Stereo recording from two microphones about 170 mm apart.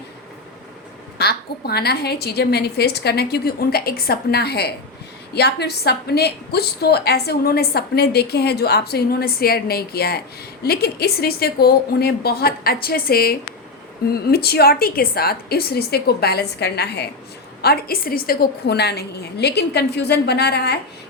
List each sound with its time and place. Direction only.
1.2 s a woman's voice: 70° left (ahead or behind)